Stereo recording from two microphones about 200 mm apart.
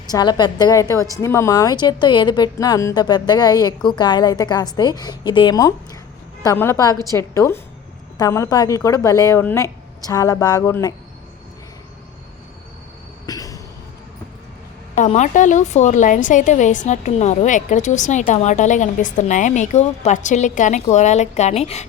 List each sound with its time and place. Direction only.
0.1 s a woman's voice: 20° left (ahead or behind)
13.2 s a sound: 15° left (ahead or behind)
14.9 s a woman's voice: 35° left (ahead or behind)